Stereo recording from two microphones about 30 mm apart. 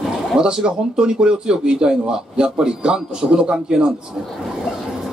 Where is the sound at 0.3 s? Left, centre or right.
Right.